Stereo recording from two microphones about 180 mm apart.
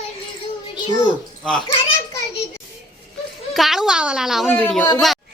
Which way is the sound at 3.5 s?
Centre (ahead or behind).